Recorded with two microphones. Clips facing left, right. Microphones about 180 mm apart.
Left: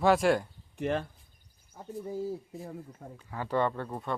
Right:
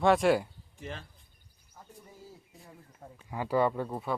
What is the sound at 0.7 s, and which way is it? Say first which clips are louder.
Speech: left 12 dB; 60° left (ahead or behind).